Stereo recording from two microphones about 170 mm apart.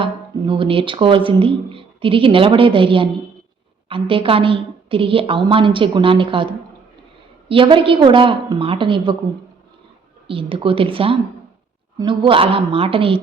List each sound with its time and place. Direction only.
0.0 s a woman's voice: 30° right (ahead or behind)
10.2 s speech: 30° right (ahead or behind)